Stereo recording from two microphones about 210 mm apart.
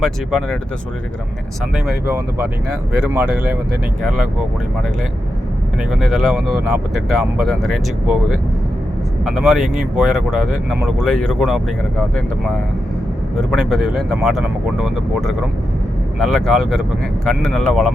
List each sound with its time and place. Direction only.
0.0 s speech: centre (ahead or behind)
1.7 s speech: 5° right (ahead or behind)
5.9 s speech: centre (ahead or behind)
13.3 s speech: centre (ahead or behind)